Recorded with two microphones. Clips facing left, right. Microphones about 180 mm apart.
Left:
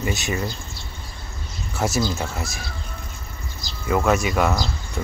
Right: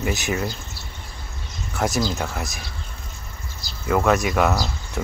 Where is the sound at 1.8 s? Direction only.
Centre (ahead or behind).